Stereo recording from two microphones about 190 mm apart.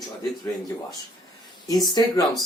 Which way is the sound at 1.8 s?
20° left (ahead or behind).